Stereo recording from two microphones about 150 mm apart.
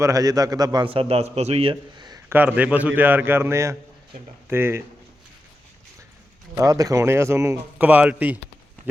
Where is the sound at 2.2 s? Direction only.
10° right (ahead or behind).